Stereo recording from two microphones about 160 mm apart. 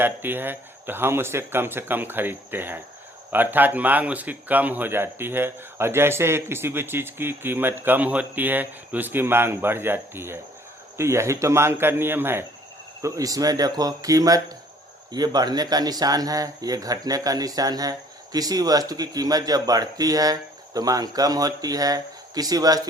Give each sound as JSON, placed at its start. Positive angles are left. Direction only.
{"t": 0.0, "sound": "a man's voice", "side_deg": -15}